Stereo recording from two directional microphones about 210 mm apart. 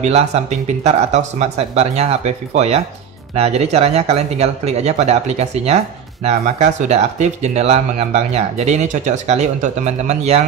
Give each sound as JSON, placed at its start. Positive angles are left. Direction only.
{"t": 0.0, "sound": "speech", "side_deg": -30}